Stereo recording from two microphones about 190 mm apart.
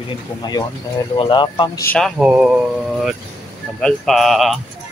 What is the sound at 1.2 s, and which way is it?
Speech, 25° left (ahead or behind).